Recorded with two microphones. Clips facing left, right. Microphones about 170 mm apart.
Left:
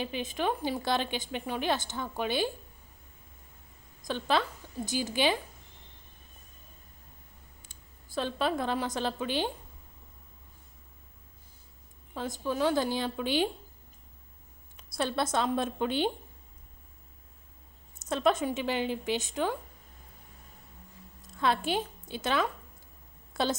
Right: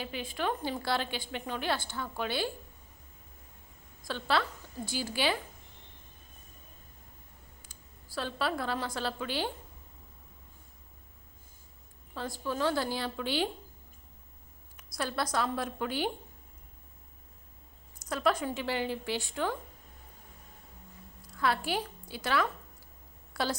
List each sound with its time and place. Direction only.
0.0 s a woman's voice: 20° left (ahead or behind)
4.0 s a woman's voice: 15° left (ahead or behind)
8.1 s a woman's voice: 20° left (ahead or behind)
12.1 s a woman's voice: 20° left (ahead or behind)
14.8 s a woman's voice: 25° left (ahead or behind)
17.9 s a woman's voice: 25° left (ahead or behind)
21.2 s a woman's voice: 25° left (ahead or behind)